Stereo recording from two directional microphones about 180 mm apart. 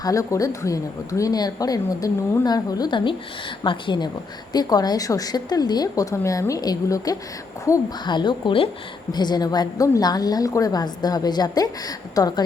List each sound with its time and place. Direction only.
0.0 s a woman's voice: 20° left (ahead or behind)